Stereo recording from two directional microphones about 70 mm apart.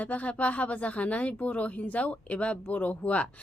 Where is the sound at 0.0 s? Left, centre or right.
Left.